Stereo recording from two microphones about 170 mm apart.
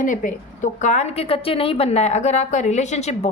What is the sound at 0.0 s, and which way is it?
A woman's voice, 50° left (ahead or behind).